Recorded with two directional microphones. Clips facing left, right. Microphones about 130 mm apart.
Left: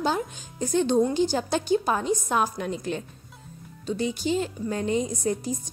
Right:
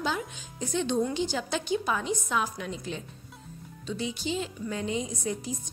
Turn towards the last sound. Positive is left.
turn(degrees=45)  # may be behind; listen again after turning